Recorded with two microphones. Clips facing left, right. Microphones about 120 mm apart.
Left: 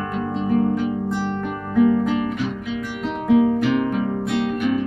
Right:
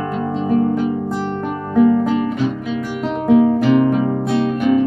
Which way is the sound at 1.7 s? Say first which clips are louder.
Right 3 dB; 35° right (ahead or behind).